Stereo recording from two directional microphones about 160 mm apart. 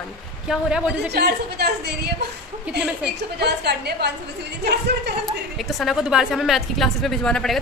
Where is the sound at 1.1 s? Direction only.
90° right.